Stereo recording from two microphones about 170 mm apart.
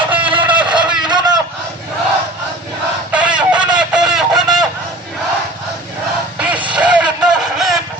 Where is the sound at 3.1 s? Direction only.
5° right (ahead or behind).